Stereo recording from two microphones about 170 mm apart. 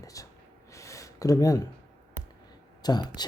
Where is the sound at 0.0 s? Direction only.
20° left (ahead or behind).